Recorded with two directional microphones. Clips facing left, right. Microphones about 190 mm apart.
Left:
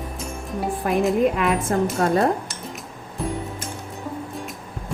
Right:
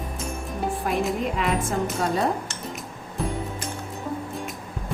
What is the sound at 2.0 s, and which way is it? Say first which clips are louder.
Speech: left 5 dB; 50° left (ahead or behind).